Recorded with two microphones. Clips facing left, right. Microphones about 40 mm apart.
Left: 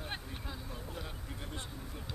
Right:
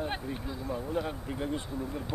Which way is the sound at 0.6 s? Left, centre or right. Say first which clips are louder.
Right 12 dB; centre.